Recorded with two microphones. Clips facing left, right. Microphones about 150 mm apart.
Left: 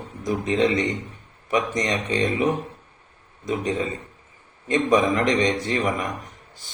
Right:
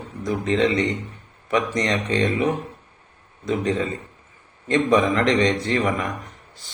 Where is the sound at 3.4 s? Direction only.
15° left (ahead or behind).